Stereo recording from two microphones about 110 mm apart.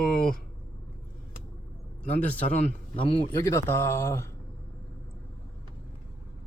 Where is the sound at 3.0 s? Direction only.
55° left (ahead or behind).